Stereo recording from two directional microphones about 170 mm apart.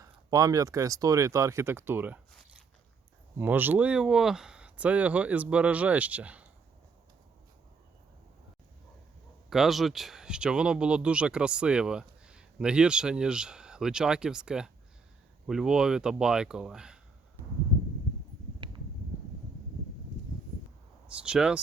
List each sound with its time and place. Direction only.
0.0 s speech: 20° right (ahead or behind)
3.3 s speech: 10° right (ahead or behind)
9.5 s speech: centre (ahead or behind)
21.1 s speech: 5° right (ahead or behind)